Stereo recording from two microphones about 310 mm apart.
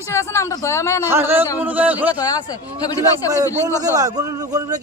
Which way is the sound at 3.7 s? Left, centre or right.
Centre.